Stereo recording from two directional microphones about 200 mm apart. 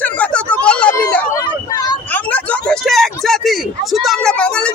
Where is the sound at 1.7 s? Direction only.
20° left (ahead or behind).